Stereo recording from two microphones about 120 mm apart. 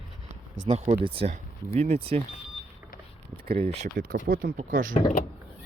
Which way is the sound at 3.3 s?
55° right (ahead or behind).